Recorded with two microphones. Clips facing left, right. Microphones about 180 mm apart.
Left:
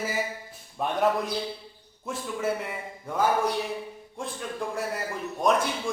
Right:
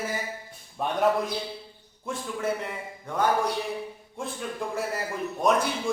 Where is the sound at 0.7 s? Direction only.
Centre (ahead or behind).